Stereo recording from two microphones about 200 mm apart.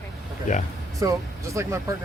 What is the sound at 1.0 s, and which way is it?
Speech, 15° right (ahead or behind).